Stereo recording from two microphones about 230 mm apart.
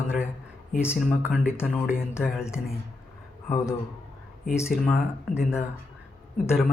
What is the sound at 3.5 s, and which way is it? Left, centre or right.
Speech, centre.